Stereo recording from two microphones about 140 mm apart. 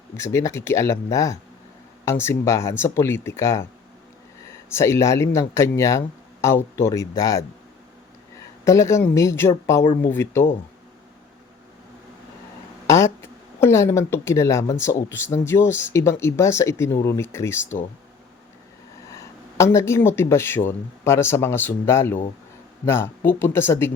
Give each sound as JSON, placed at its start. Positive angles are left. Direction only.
{"t": 0.2, "sound": "speech", "side_deg": 20}
{"t": 8.6, "sound": "speech", "side_deg": 20}
{"t": 12.9, "sound": "speech", "side_deg": 20}
{"t": 19.1, "sound": "speech", "side_deg": 20}